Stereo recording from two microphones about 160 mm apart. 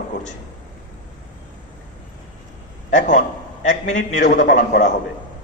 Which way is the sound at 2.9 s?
50° left (ahead or behind).